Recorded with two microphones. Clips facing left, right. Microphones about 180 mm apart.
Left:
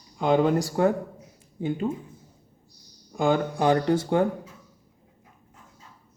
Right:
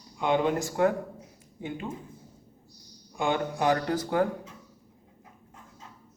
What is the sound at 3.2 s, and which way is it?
Speech, 35° left (ahead or behind).